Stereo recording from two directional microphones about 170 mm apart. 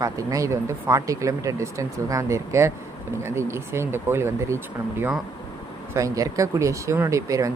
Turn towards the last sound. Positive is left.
turn(degrees=-20)  # may be behind; listen again after turning